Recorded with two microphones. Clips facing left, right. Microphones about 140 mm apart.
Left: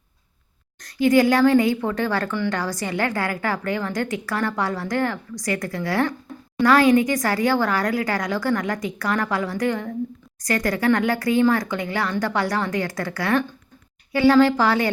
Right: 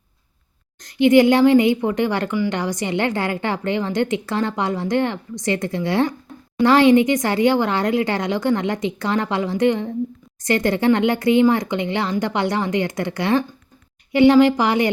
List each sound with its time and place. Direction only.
0.8 s speech: 25° right (ahead or behind)